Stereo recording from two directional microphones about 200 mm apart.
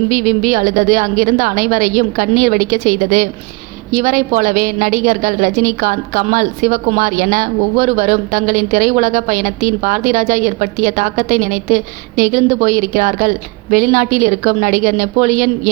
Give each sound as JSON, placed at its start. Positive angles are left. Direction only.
{"t": 0.1, "sound": "a woman's voice", "side_deg": -40}